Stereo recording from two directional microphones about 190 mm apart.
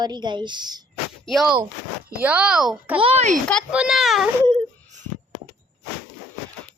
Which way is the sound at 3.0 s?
30° right (ahead or behind).